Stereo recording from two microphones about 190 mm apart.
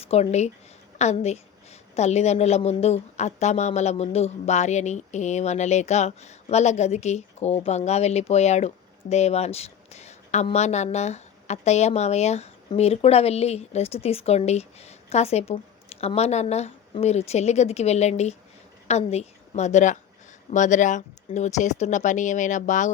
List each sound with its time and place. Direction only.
0.0 s a woman's voice: 35° left (ahead or behind)